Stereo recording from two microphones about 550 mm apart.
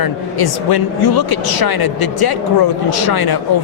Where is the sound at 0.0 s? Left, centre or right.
Left.